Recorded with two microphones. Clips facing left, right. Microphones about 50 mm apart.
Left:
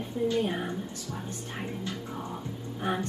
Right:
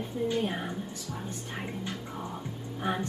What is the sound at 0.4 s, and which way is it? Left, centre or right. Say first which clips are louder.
Speech: left 2 dB; centre.